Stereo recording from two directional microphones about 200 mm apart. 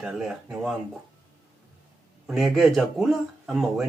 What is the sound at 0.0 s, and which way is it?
Speech, centre (ahead or behind).